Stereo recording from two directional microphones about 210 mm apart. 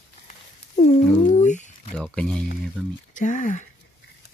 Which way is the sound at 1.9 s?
5° left (ahead or behind).